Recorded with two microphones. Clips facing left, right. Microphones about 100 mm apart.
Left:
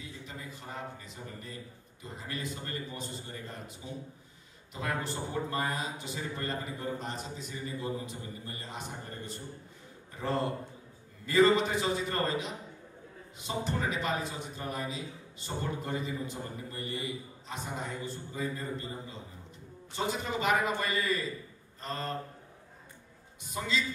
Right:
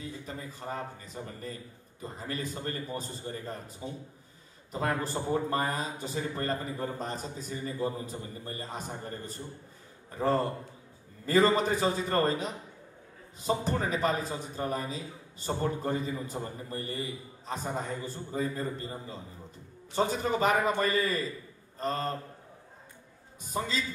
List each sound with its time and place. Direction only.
0.0 s a man's voice: 40° right (ahead or behind)
4.7 s a man's voice: 40° right (ahead or behind)
21.7 s mantra: 40° right (ahead or behind)
23.4 s a man's voice: 40° right (ahead or behind)